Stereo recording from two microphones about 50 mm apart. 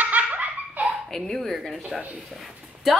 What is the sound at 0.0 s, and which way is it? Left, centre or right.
Laughter, right.